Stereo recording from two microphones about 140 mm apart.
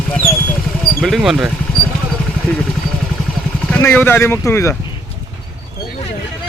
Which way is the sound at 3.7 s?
15° left (ahead or behind).